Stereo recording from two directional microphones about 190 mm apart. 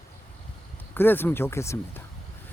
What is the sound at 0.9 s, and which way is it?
A man's voice, 10° left (ahead or behind).